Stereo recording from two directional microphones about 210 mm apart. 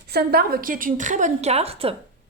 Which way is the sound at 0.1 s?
50° right (ahead or behind).